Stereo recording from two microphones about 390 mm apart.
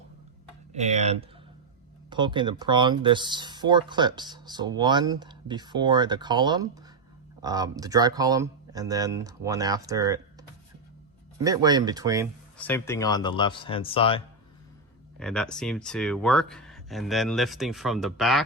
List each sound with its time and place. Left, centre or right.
0.7 s speech: centre
11.4 s speech: centre
12.5 s speech: centre
15.2 s speech: centre